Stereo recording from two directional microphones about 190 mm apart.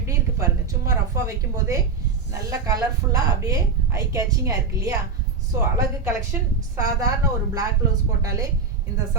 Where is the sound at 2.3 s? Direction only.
15° right (ahead or behind).